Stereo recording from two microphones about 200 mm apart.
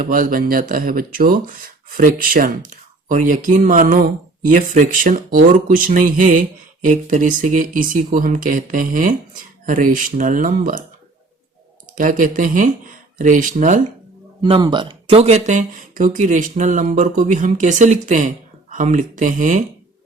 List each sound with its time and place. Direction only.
0.0 s speech: 45° right (ahead or behind)
11.9 s speech: 40° right (ahead or behind)
14.4 s speech: 25° right (ahead or behind)